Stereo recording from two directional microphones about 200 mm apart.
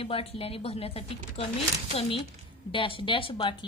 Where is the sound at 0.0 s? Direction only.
30° left (ahead or behind).